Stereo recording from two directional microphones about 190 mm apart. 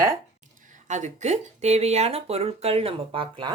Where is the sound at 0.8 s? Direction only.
40° right (ahead or behind).